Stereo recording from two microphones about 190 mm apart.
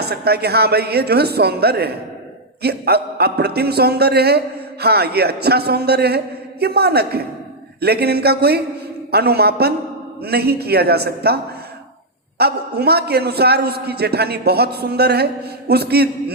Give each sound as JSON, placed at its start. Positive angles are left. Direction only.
{"t": 0.0, "sound": "a man's voice", "side_deg": -55}
{"t": 12.4, "sound": "a man's voice", "side_deg": -55}